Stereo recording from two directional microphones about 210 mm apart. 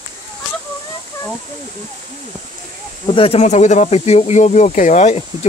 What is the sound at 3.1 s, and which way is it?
Speech, 30° left (ahead or behind).